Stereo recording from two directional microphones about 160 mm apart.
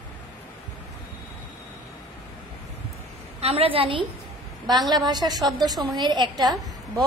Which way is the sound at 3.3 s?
40° right (ahead or behind).